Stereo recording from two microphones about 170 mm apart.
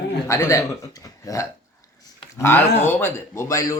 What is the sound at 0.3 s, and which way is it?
Speech, 15° left (ahead or behind).